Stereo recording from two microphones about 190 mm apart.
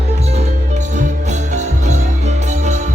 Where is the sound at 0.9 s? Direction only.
40° right (ahead or behind).